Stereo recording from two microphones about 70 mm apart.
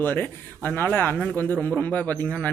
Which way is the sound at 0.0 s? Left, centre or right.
Left.